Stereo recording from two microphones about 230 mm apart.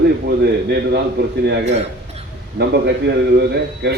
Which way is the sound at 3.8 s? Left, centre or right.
Right.